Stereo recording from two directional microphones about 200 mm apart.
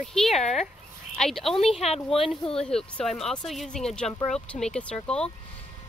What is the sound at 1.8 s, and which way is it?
Speech, 30° left (ahead or behind).